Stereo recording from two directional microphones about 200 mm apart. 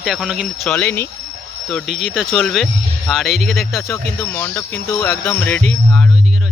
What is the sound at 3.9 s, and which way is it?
Speech, 10° left (ahead or behind).